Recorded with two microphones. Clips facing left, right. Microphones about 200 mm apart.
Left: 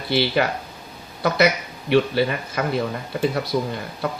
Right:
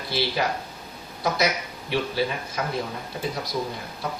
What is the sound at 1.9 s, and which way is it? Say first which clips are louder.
A man's voice: left 7 dB; 65° left (ahead or behind).